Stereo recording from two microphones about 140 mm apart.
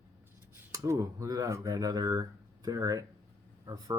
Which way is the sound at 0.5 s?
20° right (ahead or behind).